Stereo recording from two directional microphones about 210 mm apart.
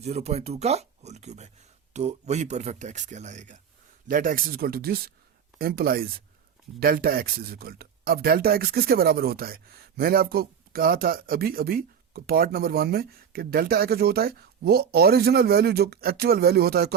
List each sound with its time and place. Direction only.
0.0 s speech: 30° right (ahead or behind); by 16.9 s 50° right (ahead or behind)